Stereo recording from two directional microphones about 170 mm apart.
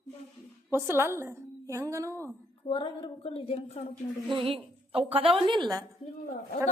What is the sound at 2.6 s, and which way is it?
A woman's voice, 30° left (ahead or behind).